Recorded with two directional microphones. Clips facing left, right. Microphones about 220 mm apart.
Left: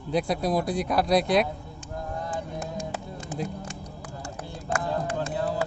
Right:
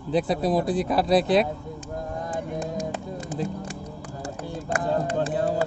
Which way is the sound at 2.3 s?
35° right (ahead or behind).